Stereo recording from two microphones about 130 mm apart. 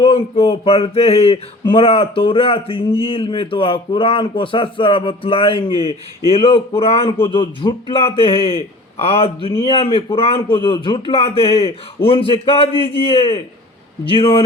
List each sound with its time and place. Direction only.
0.0 s speech: 45° left (ahead or behind)